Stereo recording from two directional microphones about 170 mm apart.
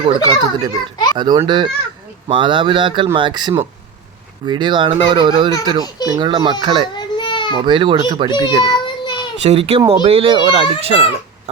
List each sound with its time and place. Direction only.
0.0 s a child's voice: 35° right (ahead or behind)
6.9 s baby cry: 25° left (ahead or behind)
7.6 s speech: 30° right (ahead or behind)
8.4 s child singing: 25° left (ahead or behind)
9.4 s a child's voice: 35° right (ahead or behind)
9.8 s a child's voice: 20° right (ahead or behind)